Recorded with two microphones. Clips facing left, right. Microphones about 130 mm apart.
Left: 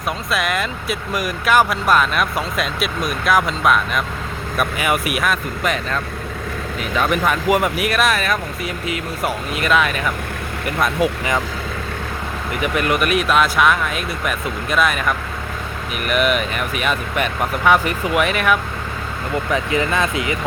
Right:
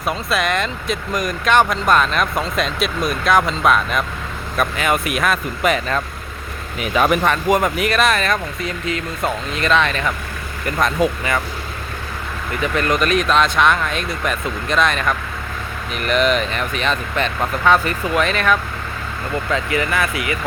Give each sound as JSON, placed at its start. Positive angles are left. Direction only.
{"t": 0.0, "sound": "speech", "side_deg": 0}
{"t": 7.3, "sound": "speech", "side_deg": 10}
{"t": 12.5, "sound": "speech", "side_deg": 15}